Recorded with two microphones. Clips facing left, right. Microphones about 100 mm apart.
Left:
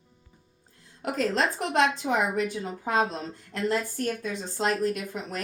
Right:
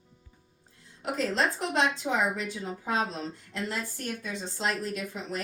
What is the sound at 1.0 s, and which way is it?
A woman's voice, 50° left (ahead or behind).